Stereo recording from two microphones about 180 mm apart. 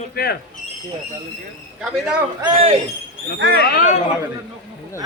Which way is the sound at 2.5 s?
35° right (ahead or behind).